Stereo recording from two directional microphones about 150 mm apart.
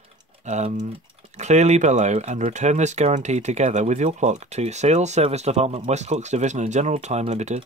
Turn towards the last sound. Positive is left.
turn(degrees=-50)  # may be behind; listen again after turning